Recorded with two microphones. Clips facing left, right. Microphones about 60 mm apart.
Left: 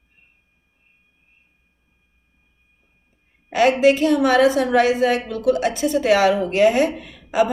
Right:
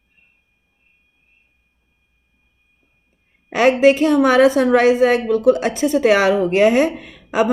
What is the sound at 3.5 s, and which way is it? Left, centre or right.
A woman's voice, right.